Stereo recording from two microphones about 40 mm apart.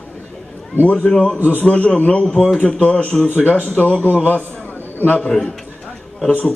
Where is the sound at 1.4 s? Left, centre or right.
Left.